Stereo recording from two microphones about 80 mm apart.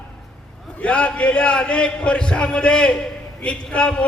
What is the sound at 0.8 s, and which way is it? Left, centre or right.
A man's voice, centre.